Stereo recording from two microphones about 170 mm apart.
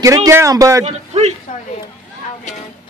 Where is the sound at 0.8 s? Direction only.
40° right (ahead or behind).